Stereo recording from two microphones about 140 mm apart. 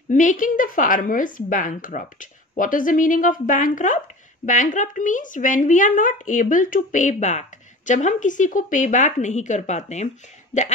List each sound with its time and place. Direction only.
0.1 s a woman's voice: 65° left (ahead or behind)